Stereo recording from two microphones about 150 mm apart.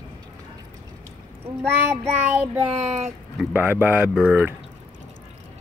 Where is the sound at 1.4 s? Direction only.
20° right (ahead or behind).